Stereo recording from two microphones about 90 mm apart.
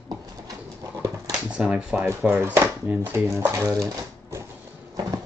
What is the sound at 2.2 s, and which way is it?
Speech, 25° right (ahead or behind).